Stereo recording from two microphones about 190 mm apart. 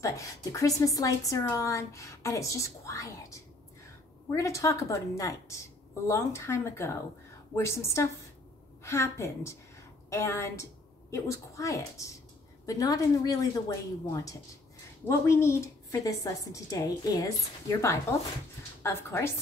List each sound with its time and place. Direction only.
0.0 s a woman's voice: 15° left (ahead or behind)